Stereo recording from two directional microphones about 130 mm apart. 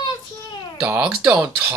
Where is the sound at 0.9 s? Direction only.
5° right (ahead or behind).